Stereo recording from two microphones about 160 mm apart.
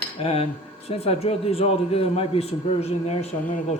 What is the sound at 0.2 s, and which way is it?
A man's voice, 35° left (ahead or behind).